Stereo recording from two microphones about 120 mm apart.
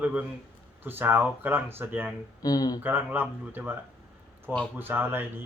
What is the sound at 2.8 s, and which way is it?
A man's voice, 15° right (ahead or behind).